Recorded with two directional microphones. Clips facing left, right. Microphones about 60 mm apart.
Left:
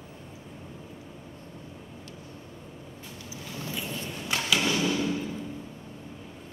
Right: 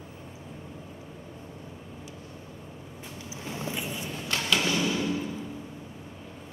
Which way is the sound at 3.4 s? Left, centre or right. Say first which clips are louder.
Right 2 dB; right.